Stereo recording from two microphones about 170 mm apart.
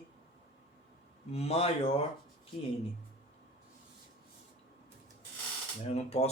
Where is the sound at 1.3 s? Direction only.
35° left (ahead or behind).